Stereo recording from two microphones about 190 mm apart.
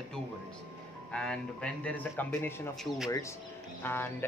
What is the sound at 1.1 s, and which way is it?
Speech, 5° left (ahead or behind).